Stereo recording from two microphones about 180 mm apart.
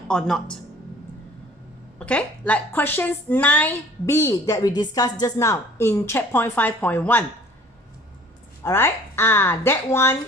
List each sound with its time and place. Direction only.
0.1 s speech: 5° left (ahead or behind)
2.0 s a woman's voice: 5° left (ahead or behind)
8.6 s a woman's voice: 15° left (ahead or behind)